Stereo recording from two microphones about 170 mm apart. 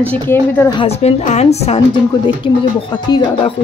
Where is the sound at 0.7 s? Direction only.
40° left (ahead or behind).